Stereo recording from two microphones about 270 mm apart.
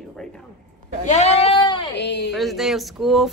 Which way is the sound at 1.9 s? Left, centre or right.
Left.